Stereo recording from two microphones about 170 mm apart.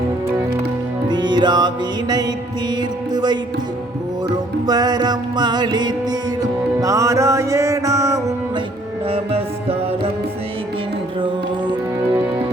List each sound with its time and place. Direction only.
1.0 s music: 25° right (ahead or behind)
4.6 s music: 25° right (ahead or behind)
9.0 s music: 35° right (ahead or behind)